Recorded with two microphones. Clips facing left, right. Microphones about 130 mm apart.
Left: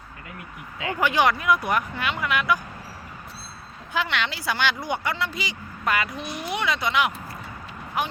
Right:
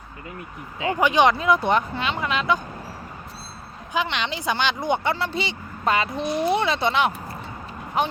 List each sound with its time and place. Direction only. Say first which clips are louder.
0.8 s speech: right 4 dB; 20° right (ahead or behind)
3.9 s speech: right 1 dB; 20° right (ahead or behind)